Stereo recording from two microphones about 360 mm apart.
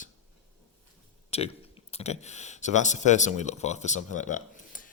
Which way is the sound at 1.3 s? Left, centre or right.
Centre.